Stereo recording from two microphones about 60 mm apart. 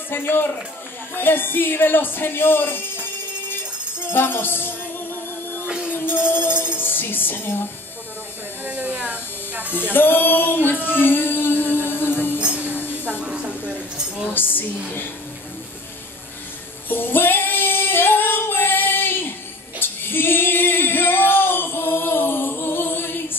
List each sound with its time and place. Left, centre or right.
0.1 s speech: left
3.4 s music: left
5.7 s music: centre
6.0 s music: left
8.6 s electric shaver: right
9.9 s music: left
12.4 s music: centre
13.2 s a sound: centre
14.3 s a sound: left
16.9 s female singing: left